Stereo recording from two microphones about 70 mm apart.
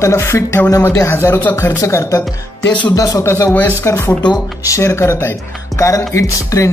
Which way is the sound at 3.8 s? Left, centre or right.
Left.